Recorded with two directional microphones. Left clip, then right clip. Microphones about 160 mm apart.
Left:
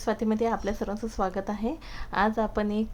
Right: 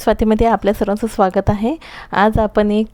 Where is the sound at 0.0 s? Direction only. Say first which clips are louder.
Right 13 dB; 65° right (ahead or behind).